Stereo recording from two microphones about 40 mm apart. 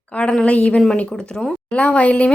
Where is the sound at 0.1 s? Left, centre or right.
Left.